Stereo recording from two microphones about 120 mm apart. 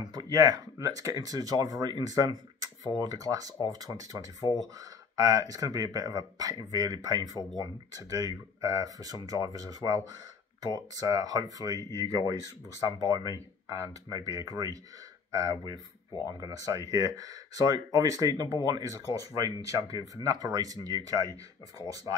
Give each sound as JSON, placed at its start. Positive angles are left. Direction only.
{"t": 0.1, "sound": "speech", "side_deg": -35}